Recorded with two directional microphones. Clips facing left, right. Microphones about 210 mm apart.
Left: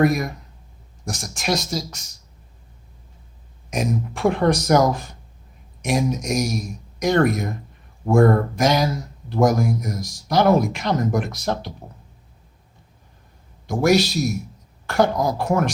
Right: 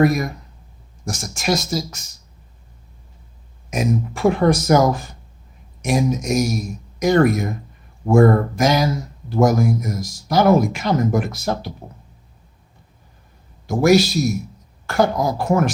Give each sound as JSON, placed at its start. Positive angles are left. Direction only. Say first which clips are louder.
{"t": 0.0, "sound": "speech", "louder": "right 2 dB", "side_deg": 0}
{"t": 3.7, "sound": "speech", "louder": "right 3 dB", "side_deg": 0}
{"t": 13.7, "sound": "speech", "louder": "right 3 dB", "side_deg": 0}